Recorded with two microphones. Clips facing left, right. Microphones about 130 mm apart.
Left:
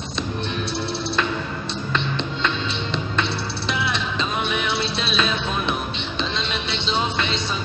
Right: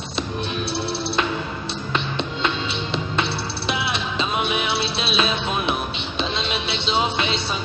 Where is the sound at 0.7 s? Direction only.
30° right (ahead or behind).